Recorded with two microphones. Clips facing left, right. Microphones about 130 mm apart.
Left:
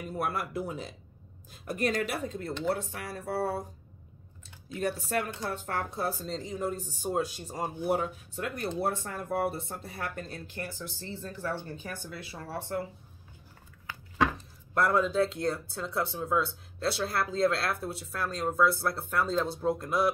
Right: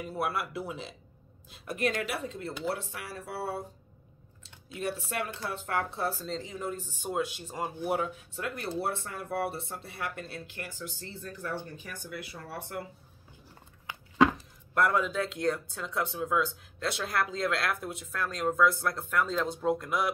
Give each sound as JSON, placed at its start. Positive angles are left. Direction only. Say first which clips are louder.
{"t": 0.2, "sound": "speech", "louder": "even", "side_deg": 45}
{"t": 4.7, "sound": "speech", "louder": "left 3 dB", "side_deg": 40}
{"t": 13.9, "sound": "a sound", "louder": "even", "side_deg": -20}
{"t": 14.7, "sound": "speech", "louder": "left 1 dB", "side_deg": 30}